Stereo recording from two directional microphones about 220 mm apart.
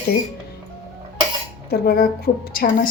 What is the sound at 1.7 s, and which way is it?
A woman's voice, 45° left (ahead or behind).